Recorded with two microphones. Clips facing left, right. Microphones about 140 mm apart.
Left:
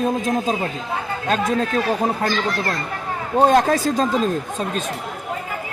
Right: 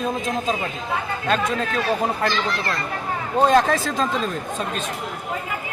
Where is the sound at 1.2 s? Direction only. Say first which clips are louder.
Left 3 dB; 40° left (ahead or behind).